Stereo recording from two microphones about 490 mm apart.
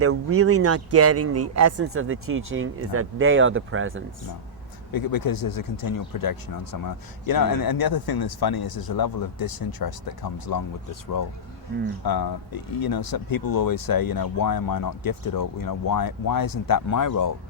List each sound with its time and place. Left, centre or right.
0.0 s speech: right
4.9 s speech: left
12.0 s speech: left